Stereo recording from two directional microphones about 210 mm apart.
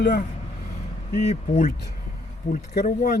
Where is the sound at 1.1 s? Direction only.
35° left (ahead or behind).